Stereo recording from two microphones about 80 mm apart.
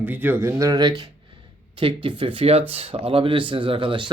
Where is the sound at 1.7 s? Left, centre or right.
Right.